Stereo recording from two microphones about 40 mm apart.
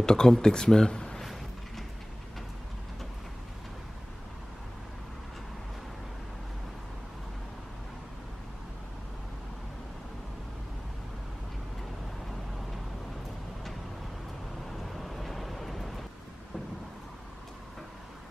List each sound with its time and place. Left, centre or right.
0.0 s speech: centre
1.2 s a sound: centre
14.8 s vehicle: centre